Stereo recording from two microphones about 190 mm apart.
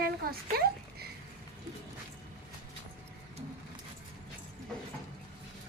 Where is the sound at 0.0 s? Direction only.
50° right (ahead or behind).